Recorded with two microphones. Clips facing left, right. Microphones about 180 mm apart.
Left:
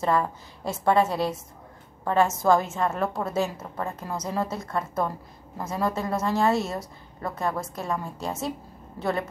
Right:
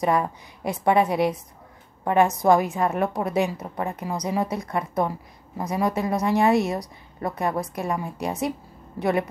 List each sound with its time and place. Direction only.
0.0 s a woman's voice: 15° right (ahead or behind)